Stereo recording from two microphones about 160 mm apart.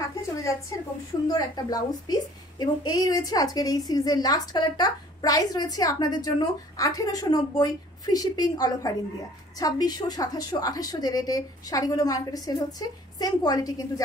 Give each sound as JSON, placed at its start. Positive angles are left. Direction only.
{"t": 1.2, "sound": "a woman's voice", "side_deg": 25}